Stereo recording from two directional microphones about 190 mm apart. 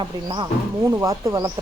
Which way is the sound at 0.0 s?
20° right (ahead or behind).